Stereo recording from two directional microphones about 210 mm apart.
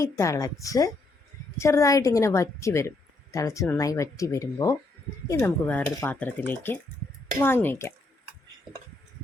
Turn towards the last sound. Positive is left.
turn(degrees=10)  # may be behind; listen again after turning